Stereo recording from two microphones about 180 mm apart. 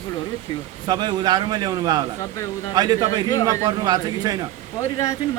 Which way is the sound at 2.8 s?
20° right (ahead or behind).